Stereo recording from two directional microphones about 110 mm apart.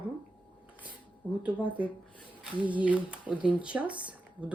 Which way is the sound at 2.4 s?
15° right (ahead or behind).